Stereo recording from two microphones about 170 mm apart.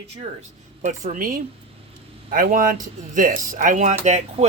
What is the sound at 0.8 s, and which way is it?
Speech, 50° right (ahead or behind).